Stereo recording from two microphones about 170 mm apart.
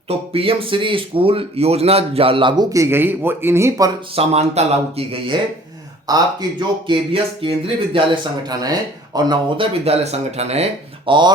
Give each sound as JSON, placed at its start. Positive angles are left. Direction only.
{"t": 0.1, "sound": "speech", "side_deg": -35}
{"t": 4.1, "sound": "speech", "side_deg": -35}
{"t": 6.1, "sound": "speech", "side_deg": -25}
{"t": 9.8, "sound": "speech", "side_deg": -40}